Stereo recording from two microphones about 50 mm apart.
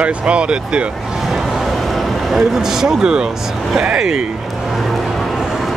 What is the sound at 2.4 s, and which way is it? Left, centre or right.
Speech, centre.